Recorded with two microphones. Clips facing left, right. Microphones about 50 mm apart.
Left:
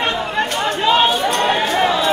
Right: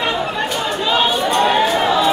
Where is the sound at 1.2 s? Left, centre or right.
Left.